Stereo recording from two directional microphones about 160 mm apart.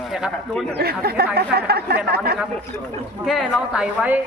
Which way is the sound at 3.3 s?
5° right (ahead or behind).